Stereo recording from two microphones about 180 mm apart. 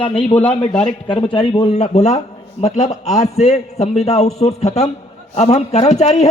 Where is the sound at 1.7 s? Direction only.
40° left (ahead or behind).